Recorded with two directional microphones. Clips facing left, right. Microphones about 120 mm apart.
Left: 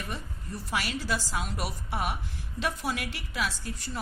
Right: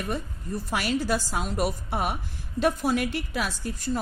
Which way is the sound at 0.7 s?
50° right (ahead or behind).